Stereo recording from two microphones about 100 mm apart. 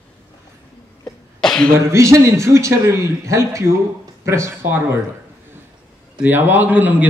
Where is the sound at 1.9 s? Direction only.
30° right (ahead or behind).